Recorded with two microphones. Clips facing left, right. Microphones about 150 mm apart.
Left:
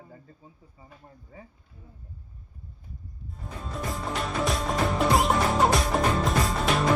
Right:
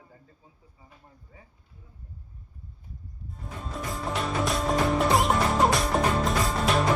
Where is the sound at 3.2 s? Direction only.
Centre (ahead or behind).